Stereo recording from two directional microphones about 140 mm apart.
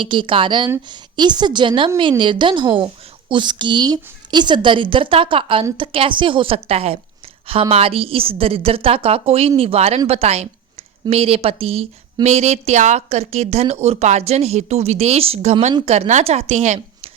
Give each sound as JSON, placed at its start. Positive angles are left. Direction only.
{"t": 0.0, "sound": "a woman's voice", "side_deg": -35}